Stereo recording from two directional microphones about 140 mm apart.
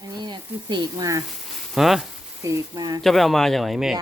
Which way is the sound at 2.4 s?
25° right (ahead or behind).